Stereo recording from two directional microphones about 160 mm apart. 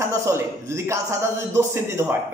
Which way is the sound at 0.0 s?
15° right (ahead or behind).